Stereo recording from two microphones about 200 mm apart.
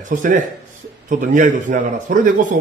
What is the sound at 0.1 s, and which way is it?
A man's voice, 40° right (ahead or behind).